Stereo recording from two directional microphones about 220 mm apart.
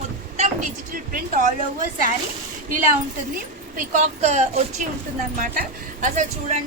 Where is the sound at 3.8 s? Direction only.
35° right (ahead or behind).